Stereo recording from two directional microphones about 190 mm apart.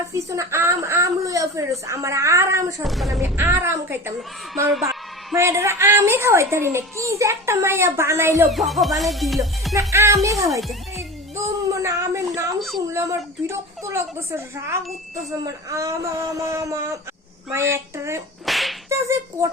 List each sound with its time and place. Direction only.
0.1 s a woman's voice: 15° right (ahead or behind)
2.8 s music: centre (ahead or behind)
3.2 s a woman's voice: 10° right (ahead or behind)
5.3 s a woman's voice: 15° right (ahead or behind)
8.4 s music: centre (ahead or behind)
9.7 s a woman's voice: 15° right (ahead or behind)
11.3 s a sound: 15° right (ahead or behind)
12.5 s a sound: centre (ahead or behind)
12.9 s a woman's voice: 15° right (ahead or behind)
18.4 s whip: centre (ahead or behind)
18.9 s a woman's voice: 15° right (ahead or behind)